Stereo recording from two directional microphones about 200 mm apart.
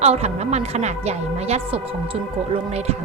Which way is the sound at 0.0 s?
30° right (ahead or behind).